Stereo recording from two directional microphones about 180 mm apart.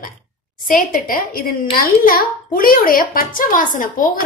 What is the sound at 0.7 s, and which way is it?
A woman's voice, 50° left (ahead or behind).